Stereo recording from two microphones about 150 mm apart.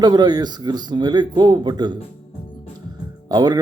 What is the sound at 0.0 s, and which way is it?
Speech, 25° right (ahead or behind).